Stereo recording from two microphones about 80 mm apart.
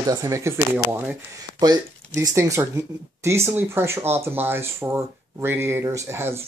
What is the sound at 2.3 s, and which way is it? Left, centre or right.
Speech, right.